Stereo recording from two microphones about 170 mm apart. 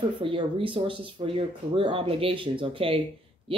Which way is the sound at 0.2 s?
30° right (ahead or behind).